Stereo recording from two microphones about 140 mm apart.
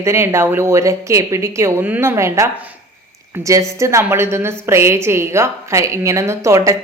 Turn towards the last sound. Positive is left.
turn(degrees=-20)  # may be behind; listen again after turning